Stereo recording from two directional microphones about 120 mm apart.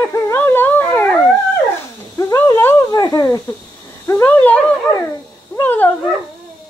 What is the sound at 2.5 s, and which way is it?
Speech, 25° left (ahead or behind).